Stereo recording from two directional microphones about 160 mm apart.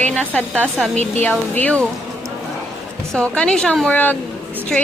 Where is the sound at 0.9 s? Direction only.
45° right (ahead or behind).